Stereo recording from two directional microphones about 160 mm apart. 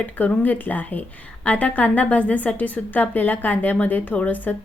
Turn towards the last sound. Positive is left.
turn(degrees=10)  # may be behind; listen again after turning